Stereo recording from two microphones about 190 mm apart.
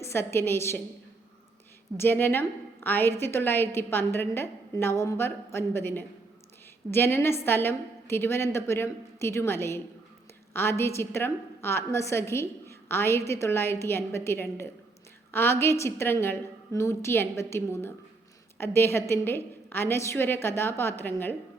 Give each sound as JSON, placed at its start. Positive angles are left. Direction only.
{"t": 0.0, "sound": "a woman's voice", "side_deg": 15}
{"t": 2.0, "sound": "a woman's voice", "side_deg": 10}